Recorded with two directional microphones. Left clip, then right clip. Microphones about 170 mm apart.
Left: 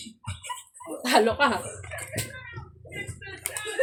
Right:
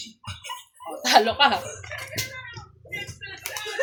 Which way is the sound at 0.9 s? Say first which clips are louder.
Right 3 dB; 10° left (ahead or behind).